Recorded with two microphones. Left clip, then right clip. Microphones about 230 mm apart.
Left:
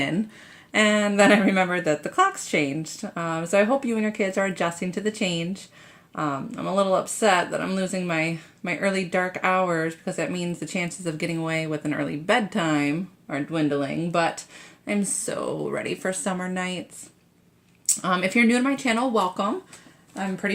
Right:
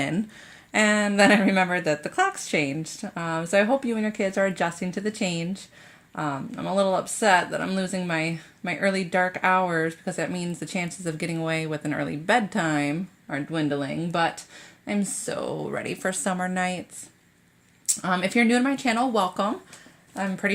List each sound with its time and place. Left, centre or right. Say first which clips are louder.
0.7 s speech: left 1 dB; centre
17.8 s speech: left 2 dB; centre